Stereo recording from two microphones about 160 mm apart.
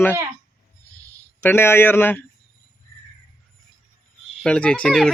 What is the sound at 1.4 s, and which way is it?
Music, 15° left (ahead or behind).